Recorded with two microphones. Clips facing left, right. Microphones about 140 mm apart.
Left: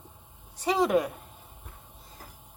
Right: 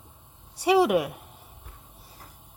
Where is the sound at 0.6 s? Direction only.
10° right (ahead or behind).